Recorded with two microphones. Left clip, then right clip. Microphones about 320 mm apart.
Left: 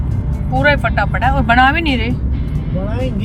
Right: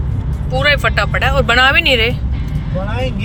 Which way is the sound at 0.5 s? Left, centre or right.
Centre.